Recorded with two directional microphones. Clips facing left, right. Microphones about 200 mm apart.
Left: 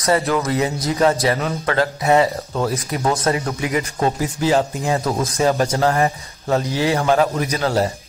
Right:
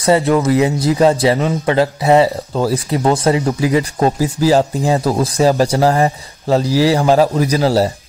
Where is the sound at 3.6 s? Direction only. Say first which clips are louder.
Right 5 dB; 35° right (ahead or behind).